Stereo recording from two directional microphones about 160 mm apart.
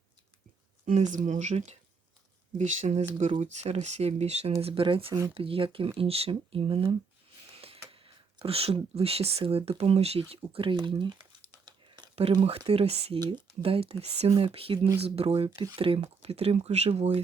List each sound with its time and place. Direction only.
1.1 s speech: 50° right (ahead or behind); by 6.9 s 35° right (ahead or behind)
7.5 s a sound: 35° right (ahead or behind)
7.9 s speech: 35° right (ahead or behind)
13.1 s speech: 25° right (ahead or behind)
13.6 s speech: 35° right (ahead or behind)